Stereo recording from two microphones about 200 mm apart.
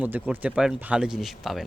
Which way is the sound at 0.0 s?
10° right (ahead or behind).